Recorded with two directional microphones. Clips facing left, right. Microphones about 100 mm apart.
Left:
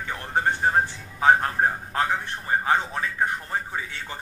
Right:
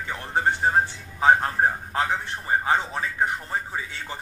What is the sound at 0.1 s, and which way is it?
Music, 20° right (ahead or behind).